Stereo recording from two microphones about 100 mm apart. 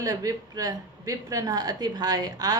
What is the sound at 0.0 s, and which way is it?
A woman's voice, 35° right (ahead or behind).